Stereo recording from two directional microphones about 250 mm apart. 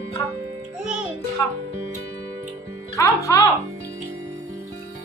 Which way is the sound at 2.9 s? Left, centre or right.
Centre.